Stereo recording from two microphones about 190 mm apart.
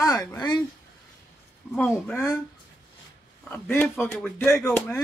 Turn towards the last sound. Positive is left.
turn(degrees=10)  # may be behind; listen again after turning